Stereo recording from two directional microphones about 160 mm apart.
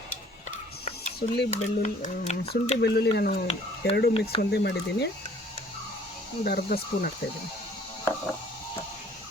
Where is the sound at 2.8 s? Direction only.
90° left.